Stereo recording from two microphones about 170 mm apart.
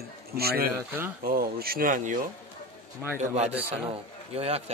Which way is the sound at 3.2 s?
40° right (ahead or behind).